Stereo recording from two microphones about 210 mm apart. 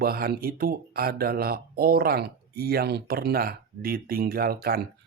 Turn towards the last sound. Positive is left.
turn(degrees=-45)  # may be behind; listen again after turning